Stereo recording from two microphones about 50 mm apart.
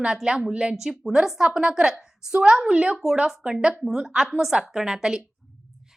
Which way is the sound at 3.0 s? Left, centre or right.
Centre.